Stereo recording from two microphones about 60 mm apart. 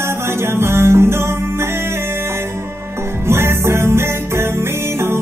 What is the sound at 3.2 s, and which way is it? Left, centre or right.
Music, right.